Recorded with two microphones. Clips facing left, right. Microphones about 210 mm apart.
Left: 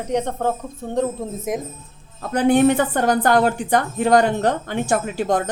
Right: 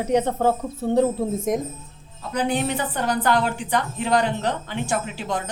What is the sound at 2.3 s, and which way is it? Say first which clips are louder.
A woman's voice: left 8 dB; 50° left (ahead or behind).